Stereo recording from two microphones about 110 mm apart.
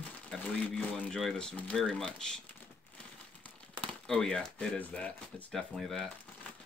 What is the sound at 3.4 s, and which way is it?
Speech, 5° left (ahead or behind).